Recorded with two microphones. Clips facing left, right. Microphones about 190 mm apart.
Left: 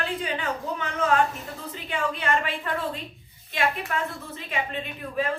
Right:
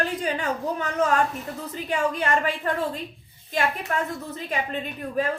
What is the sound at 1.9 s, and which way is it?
A woman's voice, 40° right (ahead or behind).